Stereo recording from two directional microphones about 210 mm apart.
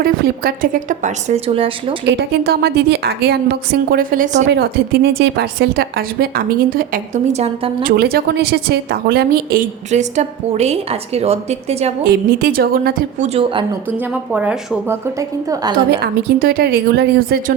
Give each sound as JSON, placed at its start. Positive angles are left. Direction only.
{"t": 0.0, "sound": "a woman's voice", "side_deg": -45}
{"t": 2.0, "sound": "a woman's voice", "side_deg": -50}
{"t": 4.4, "sound": "a woman's voice", "side_deg": -50}
{"t": 7.9, "sound": "a woman's voice", "side_deg": -45}
{"t": 12.0, "sound": "a woman's voice", "side_deg": -45}
{"t": 13.9, "sound": "a woman's voice", "side_deg": -5}
{"t": 15.9, "sound": "a woman's voice", "side_deg": -50}